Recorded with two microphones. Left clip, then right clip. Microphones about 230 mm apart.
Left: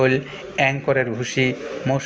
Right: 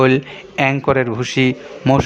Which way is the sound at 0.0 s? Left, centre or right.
Right.